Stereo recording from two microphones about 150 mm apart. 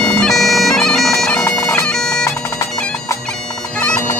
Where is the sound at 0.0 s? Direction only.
5° left (ahead or behind).